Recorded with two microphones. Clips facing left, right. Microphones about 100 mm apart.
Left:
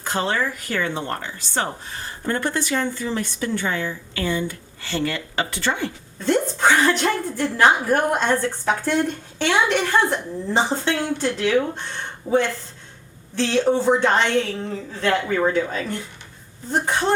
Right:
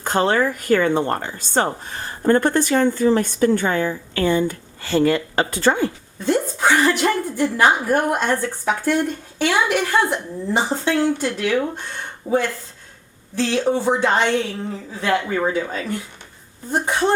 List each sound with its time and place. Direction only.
0.0 s speech: 50° right (ahead or behind)
6.1 s a woman's voice: 10° right (ahead or behind)